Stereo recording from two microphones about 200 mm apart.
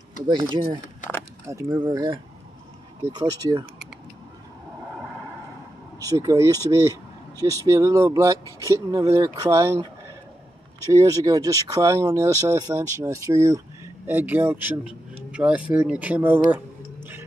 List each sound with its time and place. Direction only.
0.3 s speech: 20° right (ahead or behind)
5.9 s speech: 15° right (ahead or behind)
10.9 s speech: 15° right (ahead or behind)
16.4 s a sound: 10° right (ahead or behind)